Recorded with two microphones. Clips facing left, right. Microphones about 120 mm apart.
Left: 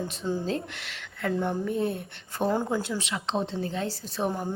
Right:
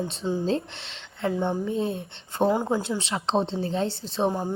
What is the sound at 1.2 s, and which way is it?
A woman's voice, 20° right (ahead or behind).